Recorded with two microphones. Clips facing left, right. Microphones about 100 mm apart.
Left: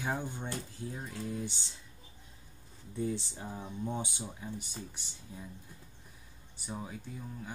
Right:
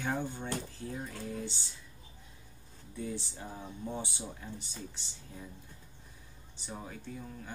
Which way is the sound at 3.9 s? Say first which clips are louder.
Right 1 dB; 15° left (ahead or behind).